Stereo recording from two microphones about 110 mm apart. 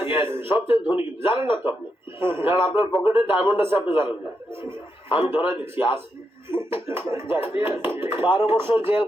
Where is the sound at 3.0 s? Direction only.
20° right (ahead or behind).